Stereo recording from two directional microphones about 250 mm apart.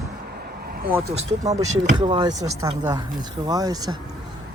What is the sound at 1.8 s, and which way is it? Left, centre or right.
Speech, centre.